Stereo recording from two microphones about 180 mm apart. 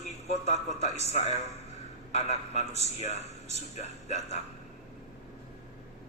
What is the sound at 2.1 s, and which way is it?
A man's voice, 40° left (ahead or behind).